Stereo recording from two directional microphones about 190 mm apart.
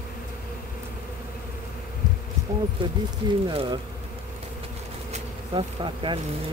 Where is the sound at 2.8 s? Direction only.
25° right (ahead or behind).